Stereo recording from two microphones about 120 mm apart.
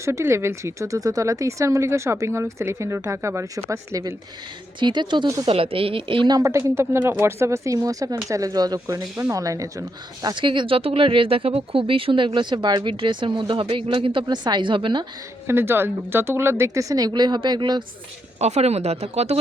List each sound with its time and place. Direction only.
0.0 s speech: 25° right (ahead or behind)
4.8 s speech: 40° right (ahead or behind)
5.5 s speech: 50° right (ahead or behind)
6.4 s speech: 25° right (ahead or behind)
10.2 s speech: 40° right (ahead or behind)
15.4 s speech: 20° right (ahead or behind); by 17.8 s 40° right (ahead or behind)
18.3 s speech: 65° right (ahead or behind)